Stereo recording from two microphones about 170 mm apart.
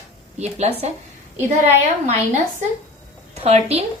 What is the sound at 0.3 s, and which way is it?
Speech, 40° right (ahead or behind).